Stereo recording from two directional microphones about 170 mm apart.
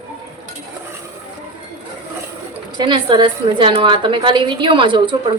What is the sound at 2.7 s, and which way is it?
A woman's voice, 30° right (ahead or behind).